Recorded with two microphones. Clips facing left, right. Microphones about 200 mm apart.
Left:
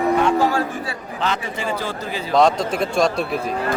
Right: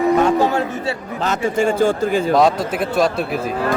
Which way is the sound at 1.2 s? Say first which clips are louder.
Right 7 dB; 45° right (ahead or behind).